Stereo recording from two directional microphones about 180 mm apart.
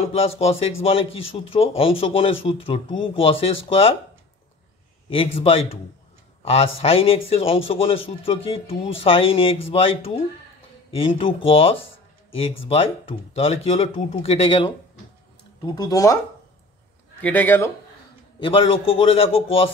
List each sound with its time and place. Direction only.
0.1 s speech: 35° left (ahead or behind)
5.1 s speech: 35° left (ahead or behind)
17.2 s speech: 10° left (ahead or behind)
18.4 s speech: 30° left (ahead or behind)